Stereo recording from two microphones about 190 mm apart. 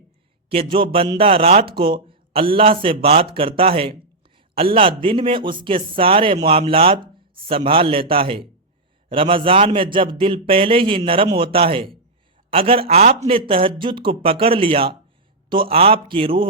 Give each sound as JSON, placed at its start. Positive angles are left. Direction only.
{"t": 0.4, "sound": "a man's voice", "side_deg": -30}